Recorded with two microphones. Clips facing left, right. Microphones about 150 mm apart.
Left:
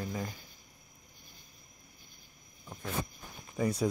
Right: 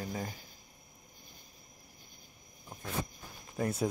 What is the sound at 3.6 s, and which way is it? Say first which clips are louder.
Speech: left 2 dB; 5° right (ahead or behind).